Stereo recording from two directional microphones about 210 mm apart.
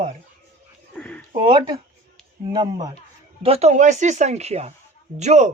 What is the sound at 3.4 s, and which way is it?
Speech, 30° right (ahead or behind).